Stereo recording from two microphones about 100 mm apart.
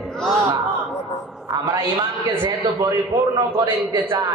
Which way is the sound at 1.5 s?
40° right (ahead or behind).